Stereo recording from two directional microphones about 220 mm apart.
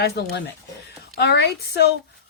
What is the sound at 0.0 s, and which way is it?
Speech, 50° left (ahead or behind).